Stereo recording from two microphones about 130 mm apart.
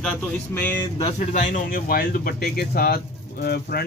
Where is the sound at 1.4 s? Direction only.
85° left.